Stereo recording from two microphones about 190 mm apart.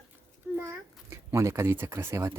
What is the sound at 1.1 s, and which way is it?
Speech, 15° right (ahead or behind).